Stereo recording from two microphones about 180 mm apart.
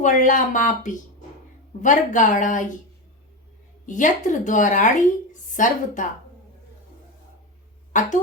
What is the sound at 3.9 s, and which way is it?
A woman's voice, 45° left (ahead or behind).